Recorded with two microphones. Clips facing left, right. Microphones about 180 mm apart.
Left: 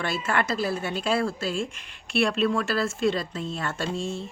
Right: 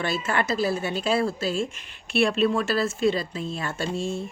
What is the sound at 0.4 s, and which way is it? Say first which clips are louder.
Speech: right 2 dB; 5° right (ahead or behind).